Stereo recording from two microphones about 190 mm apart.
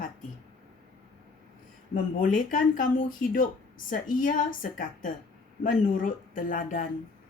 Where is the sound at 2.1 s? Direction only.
45° left (ahead or behind).